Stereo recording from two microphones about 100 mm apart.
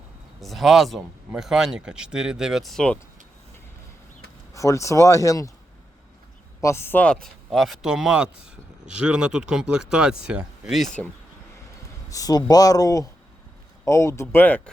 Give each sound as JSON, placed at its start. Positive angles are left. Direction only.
{"t": 0.4, "sound": "speech", "side_deg": 0}
{"t": 4.5, "sound": "speech", "side_deg": 30}
{"t": 6.6, "sound": "speech", "side_deg": 25}
{"t": 12.0, "sound": "speech", "side_deg": 35}